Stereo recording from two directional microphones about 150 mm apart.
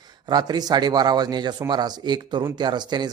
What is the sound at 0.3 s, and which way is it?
Speech, 30° right (ahead or behind).